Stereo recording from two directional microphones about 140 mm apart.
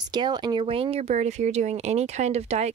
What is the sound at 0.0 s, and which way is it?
Speech, 30° right (ahead or behind).